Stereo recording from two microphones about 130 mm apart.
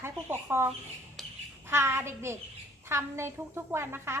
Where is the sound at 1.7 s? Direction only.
20° right (ahead or behind).